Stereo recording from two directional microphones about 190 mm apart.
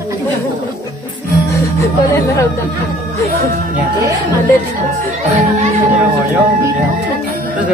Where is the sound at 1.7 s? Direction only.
15° left (ahead or behind).